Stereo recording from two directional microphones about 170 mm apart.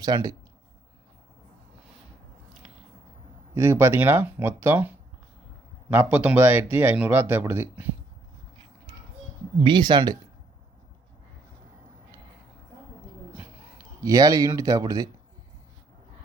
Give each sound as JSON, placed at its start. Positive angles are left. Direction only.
{"t": 0.0, "sound": "speech", "side_deg": -20}
{"t": 3.5, "sound": "speech", "side_deg": -15}
{"t": 5.9, "sound": "speech", "side_deg": -10}
{"t": 9.6, "sound": "speech", "side_deg": -25}
{"t": 13.3, "sound": "a sound", "side_deg": -15}